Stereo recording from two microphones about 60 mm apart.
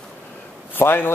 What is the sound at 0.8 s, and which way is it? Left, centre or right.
Speech, left.